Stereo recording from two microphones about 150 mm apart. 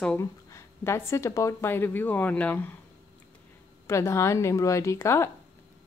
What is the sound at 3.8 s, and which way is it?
A woman's voice, 20° left (ahead or behind).